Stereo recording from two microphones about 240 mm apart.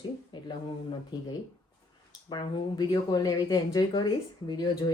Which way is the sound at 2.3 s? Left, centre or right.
Centre.